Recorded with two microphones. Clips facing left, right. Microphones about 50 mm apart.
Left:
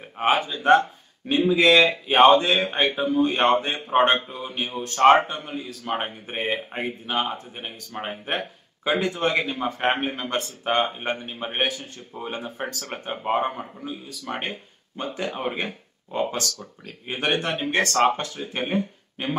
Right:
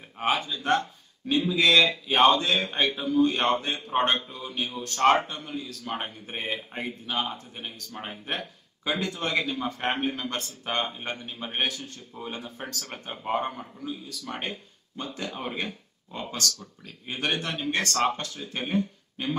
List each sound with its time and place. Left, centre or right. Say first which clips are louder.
0.2 s speech: left 5 dB; left